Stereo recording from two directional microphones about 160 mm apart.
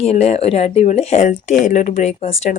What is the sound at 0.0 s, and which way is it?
Speech, 40° left (ahead or behind).